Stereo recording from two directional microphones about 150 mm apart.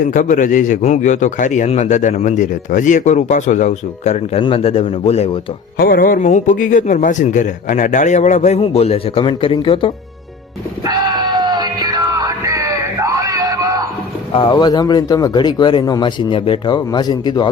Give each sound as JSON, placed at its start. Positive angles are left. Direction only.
{"t": 0.0, "sound": "a man's voice", "side_deg": 60}
{"t": 5.7, "sound": "a man's voice", "side_deg": 75}
{"t": 10.8, "sound": "music", "side_deg": -30}
{"t": 14.3, "sound": "speech", "side_deg": 30}